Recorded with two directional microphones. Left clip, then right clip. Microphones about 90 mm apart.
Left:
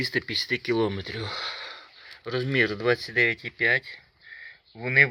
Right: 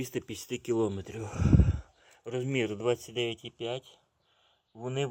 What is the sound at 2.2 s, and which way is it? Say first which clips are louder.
Speech: left 7 dB; 5° right (ahead or behind).